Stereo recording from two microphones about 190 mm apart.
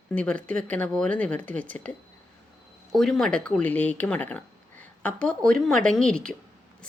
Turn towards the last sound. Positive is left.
turn(degrees=5)  # may be behind; listen again after turning